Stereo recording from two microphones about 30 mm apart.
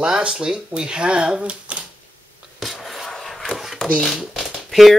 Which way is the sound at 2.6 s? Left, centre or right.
Centre.